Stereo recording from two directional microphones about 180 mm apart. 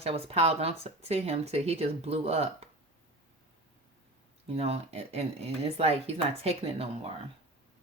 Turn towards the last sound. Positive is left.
turn(degrees=-35)  # may be behind; listen again after turning